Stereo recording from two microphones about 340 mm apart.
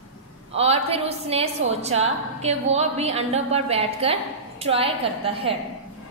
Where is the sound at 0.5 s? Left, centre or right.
Centre.